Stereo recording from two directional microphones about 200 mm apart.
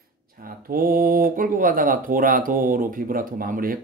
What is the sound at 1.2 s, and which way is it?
Speech, 45° right (ahead or behind).